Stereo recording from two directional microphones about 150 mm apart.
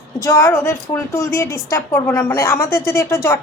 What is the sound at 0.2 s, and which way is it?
A woman's voice, 20° left (ahead or behind).